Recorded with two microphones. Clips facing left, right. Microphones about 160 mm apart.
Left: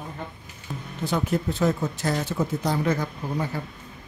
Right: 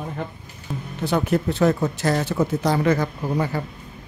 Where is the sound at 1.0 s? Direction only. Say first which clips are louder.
Right 4 dB; 70° right (ahead or behind); by 3.6 s 90° right.